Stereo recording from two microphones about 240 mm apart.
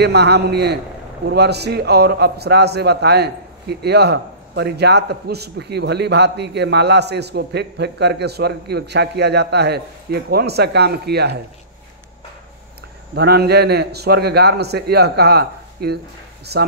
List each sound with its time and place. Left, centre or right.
0.0 s a man's voice: right
13.1 s a man's voice: right